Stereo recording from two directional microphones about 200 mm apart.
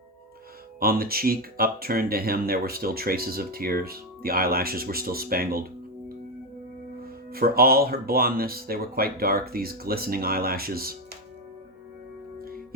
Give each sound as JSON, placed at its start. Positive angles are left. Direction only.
{"t": 0.8, "sound": "speech", "side_deg": -50}
{"t": 7.0, "sound": "speech", "side_deg": -50}